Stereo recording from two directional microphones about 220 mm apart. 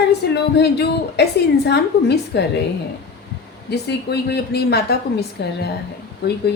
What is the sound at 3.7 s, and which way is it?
A woman's voice, 50° left (ahead or behind).